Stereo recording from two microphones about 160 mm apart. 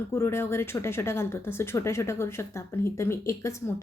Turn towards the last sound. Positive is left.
turn(degrees=20)  # may be behind; listen again after turning